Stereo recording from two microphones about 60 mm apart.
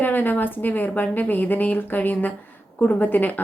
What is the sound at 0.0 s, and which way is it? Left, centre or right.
Speech, left.